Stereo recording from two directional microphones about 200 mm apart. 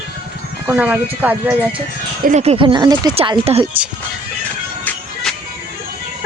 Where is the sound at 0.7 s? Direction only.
10° right (ahead or behind).